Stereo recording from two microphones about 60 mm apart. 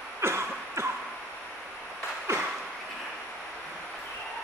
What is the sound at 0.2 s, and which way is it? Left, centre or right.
Cough, right.